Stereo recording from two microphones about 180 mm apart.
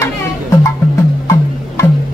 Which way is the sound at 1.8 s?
15° left (ahead or behind).